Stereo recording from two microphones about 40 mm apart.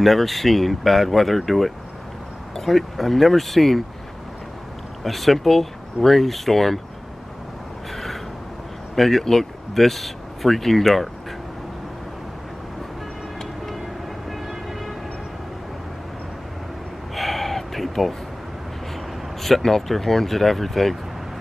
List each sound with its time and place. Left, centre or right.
0.0 s speech: centre
5.0 s speech: centre
7.9 s a sound: centre
8.9 s speech: centre
17.1 s a sound: centre
19.4 s speech: centre